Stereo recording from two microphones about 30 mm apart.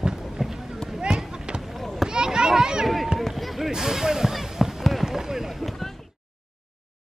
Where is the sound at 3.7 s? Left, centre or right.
Centre.